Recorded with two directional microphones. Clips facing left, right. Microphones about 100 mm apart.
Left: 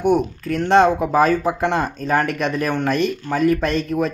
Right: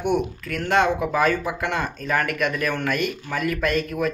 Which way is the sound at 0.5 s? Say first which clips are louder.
Left 6 dB; 35° left (ahead or behind).